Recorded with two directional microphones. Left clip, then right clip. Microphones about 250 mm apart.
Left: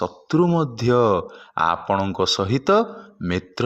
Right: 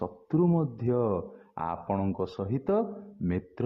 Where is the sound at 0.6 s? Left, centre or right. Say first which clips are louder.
Left 10 dB; centre.